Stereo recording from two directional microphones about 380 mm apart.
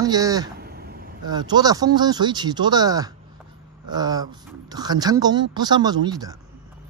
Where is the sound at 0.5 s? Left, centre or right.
Right.